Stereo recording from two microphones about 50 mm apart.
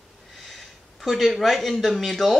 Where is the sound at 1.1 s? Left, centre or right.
Centre.